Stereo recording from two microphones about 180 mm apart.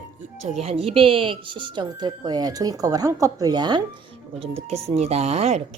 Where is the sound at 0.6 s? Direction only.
35° right (ahead or behind).